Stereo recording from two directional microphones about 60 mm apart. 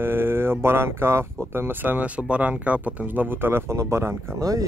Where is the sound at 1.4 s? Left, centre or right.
Right.